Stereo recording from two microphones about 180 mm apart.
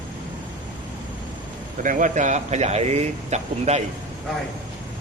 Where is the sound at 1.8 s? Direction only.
45° right (ahead or behind).